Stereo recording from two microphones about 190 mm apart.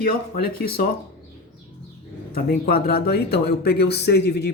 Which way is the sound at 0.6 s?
55° left (ahead or behind).